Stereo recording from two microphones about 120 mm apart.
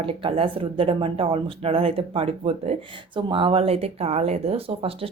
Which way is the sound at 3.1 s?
45° right (ahead or behind).